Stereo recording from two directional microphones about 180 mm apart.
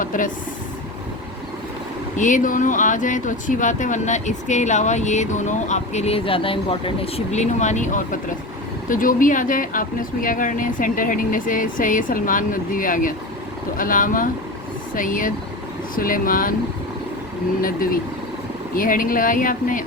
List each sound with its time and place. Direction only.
0.0 s speech: 45° left (ahead or behind)
2.1 s speech: 45° left (ahead or behind)
17.6 s speech: 50° left (ahead or behind)